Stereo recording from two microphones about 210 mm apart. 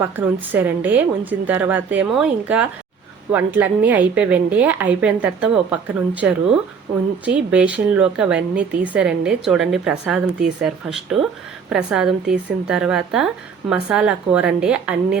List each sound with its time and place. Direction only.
0.0 s a woman's voice: 10° right (ahead or behind)